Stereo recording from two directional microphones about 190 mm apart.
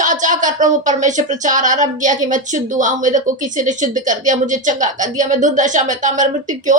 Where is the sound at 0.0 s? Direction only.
40° right (ahead or behind).